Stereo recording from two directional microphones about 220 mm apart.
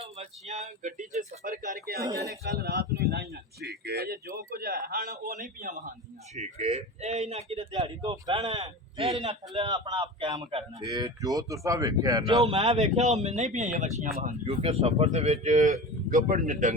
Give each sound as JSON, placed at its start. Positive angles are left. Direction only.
{"t": 0.0, "sound": "speech", "side_deg": -30}
{"t": 2.6, "sound": "a man's voice", "side_deg": -50}